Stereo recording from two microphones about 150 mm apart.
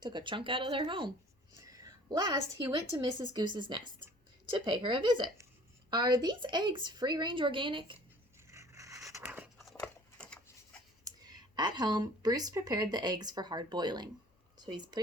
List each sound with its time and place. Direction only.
0.0 s a woman's voice: 30° right (ahead or behind)
8.4 s zipper: 20° right (ahead or behind)
9.2 s a sound: 5° right (ahead or behind)
11.0 s speech: 25° right (ahead or behind)